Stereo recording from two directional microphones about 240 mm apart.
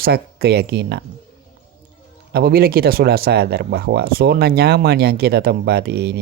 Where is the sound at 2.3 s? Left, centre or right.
Right.